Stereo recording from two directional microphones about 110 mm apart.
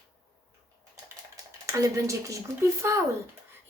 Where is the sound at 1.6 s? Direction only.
30° right (ahead or behind).